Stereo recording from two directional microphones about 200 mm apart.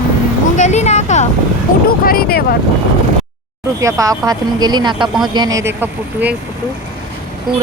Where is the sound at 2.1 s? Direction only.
50° left (ahead or behind).